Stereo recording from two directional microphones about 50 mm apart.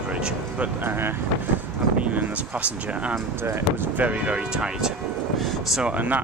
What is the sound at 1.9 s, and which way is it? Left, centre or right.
Speech, right.